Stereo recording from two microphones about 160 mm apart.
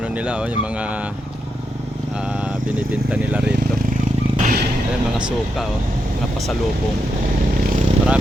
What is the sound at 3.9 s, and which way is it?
Motorcycle, 50° right (ahead or behind).